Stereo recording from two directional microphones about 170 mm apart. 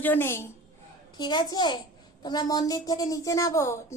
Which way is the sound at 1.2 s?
25° left (ahead or behind).